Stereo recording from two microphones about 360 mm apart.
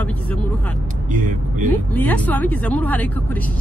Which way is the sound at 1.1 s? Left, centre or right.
Right.